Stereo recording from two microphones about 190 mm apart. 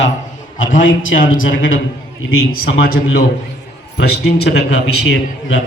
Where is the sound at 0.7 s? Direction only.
90° left.